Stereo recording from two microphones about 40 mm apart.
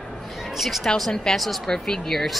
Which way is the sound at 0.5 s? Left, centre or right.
Centre.